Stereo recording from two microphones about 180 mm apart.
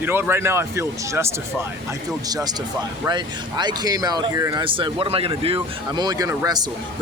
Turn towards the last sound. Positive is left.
turn(degrees=-20)  # may be behind; listen again after turning